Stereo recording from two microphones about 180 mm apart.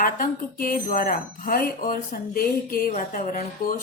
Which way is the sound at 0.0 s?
50° left (ahead or behind).